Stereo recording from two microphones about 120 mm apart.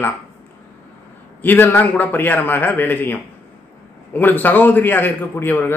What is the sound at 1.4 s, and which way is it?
A man's voice, 15° left (ahead or behind).